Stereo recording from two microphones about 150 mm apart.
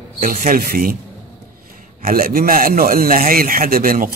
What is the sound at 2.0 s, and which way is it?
A man's voice, 75° right (ahead or behind).